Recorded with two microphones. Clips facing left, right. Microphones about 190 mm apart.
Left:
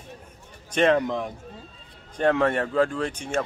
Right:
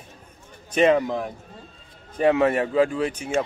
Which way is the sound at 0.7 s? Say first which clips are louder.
Right 2 dB; 5° right (ahead or behind).